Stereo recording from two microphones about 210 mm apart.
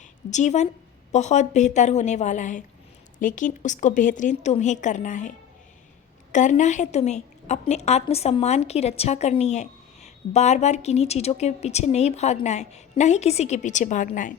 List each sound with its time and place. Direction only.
0.0 s a woman's voice: 35° left (ahead or behind)
6.3 s a woman's voice: 35° left (ahead or behind)